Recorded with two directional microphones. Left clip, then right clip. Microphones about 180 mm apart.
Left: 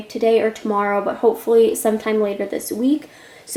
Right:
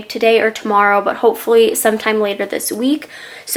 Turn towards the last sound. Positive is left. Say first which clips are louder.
# right 3 dB
turn(degrees=15)  # may be behind; listen again after turning